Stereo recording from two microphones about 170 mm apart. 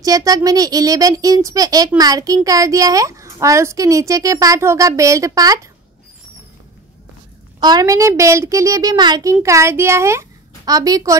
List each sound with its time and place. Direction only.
0.0 s a child's voice: 20° right (ahead or behind)
7.6 s a child's voice: 20° right (ahead or behind)